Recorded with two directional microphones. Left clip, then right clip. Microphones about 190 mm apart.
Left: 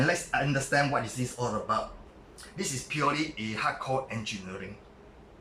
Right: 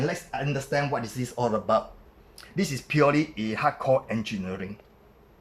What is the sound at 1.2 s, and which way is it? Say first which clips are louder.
Speech: right 1 dB; 40° right (ahead or behind).